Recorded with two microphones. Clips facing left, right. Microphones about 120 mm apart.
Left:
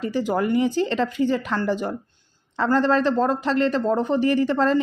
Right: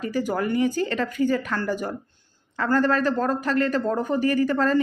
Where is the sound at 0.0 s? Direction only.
25° left (ahead or behind).